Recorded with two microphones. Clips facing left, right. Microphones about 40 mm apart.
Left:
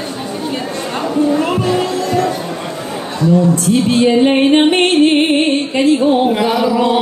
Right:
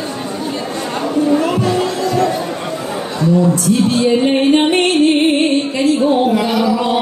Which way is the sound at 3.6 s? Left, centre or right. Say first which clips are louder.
Left 1 dB; left.